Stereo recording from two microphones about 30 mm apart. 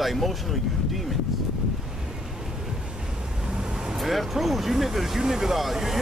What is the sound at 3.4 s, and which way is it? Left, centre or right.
Vehicle, right.